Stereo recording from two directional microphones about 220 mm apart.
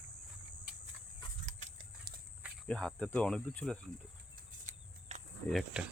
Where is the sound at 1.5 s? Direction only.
35° right (ahead or behind).